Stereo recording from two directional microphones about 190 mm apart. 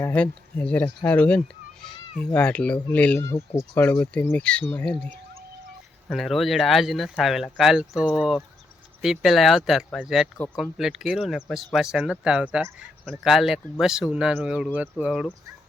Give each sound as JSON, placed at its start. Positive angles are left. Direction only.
{"t": 0.0, "sound": "speech", "side_deg": 5}
{"t": 10.3, "sound": "speech", "side_deg": 10}
{"t": 10.6, "sound": "speech", "side_deg": 0}